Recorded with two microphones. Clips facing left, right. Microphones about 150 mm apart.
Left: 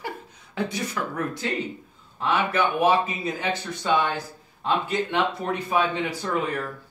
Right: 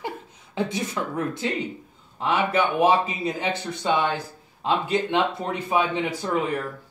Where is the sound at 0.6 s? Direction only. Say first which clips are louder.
Right 2 dB; 25° right (ahead or behind).